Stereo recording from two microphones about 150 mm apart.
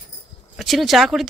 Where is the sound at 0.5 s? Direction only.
Centre (ahead or behind).